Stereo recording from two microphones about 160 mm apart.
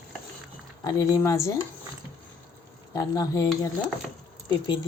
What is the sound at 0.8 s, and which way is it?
Speech, 20° left (ahead or behind).